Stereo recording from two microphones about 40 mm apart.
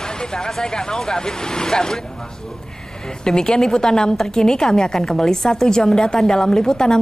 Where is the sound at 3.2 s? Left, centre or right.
Centre.